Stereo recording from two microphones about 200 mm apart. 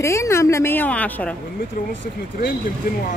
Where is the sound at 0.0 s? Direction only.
15° left (ahead or behind).